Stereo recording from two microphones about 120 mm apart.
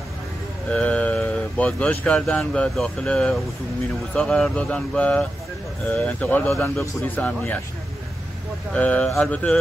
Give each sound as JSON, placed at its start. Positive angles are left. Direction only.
{"t": 0.7, "sound": "speech", "side_deg": 10}
{"t": 6.5, "sound": "speech", "side_deg": 20}
{"t": 8.7, "sound": "speech", "side_deg": 10}